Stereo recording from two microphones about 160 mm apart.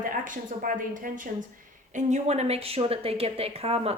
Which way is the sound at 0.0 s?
55° right (ahead or behind).